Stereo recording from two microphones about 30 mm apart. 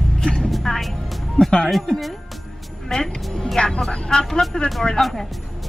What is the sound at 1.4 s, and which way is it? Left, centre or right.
Speech, left.